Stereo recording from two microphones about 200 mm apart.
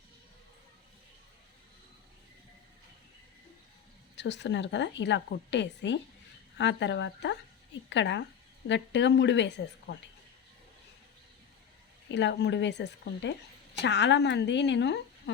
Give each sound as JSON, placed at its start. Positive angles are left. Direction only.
{"t": 4.1, "sound": "speech", "side_deg": 60}
{"t": 12.1, "sound": "speech", "side_deg": 60}